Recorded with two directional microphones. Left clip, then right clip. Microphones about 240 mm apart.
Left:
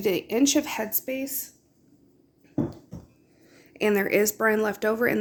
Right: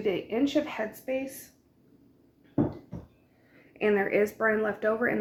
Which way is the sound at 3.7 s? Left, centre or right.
Left.